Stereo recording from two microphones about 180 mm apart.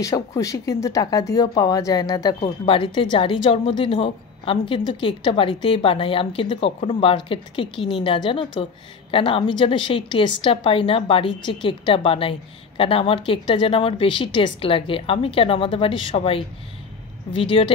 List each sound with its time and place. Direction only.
0.0 s speech: 20° left (ahead or behind)